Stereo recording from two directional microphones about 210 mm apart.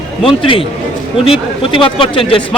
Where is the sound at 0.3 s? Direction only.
25° left (ahead or behind).